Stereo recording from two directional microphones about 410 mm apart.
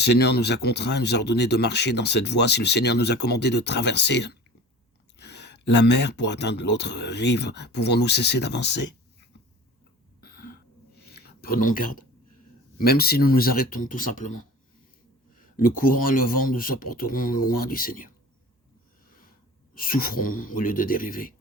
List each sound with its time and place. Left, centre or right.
0.0 s speech: left
10.2 s throat clearing: left
11.1 s a sound: left
12.8 s speech: left
15.4 s speech: centre
19.7 s speech: left